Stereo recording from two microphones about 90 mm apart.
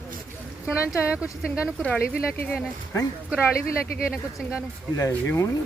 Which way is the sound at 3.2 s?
10° right (ahead or behind).